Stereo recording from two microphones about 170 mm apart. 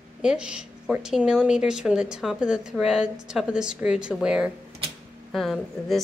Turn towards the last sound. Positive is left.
turn(degrees=0)  # may be behind; listen again after turning